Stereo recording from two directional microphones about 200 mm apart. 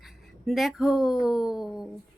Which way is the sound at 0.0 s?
Centre (ahead or behind).